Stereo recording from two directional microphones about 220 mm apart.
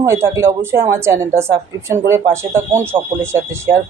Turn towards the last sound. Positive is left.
turn(degrees=-10)  # may be behind; listen again after turning